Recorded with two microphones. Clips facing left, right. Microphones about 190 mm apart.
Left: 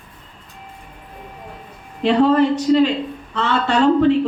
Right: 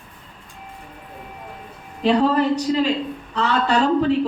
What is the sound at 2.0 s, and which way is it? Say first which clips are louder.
A woman's voice: left 3 dB; 40° right (ahead or behind).